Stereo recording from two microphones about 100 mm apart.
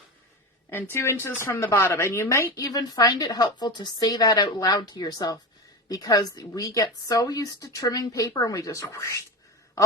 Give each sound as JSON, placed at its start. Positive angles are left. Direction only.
{"t": 0.7, "sound": "speech", "side_deg": 20}
{"t": 2.6, "sound": "speech", "side_deg": 40}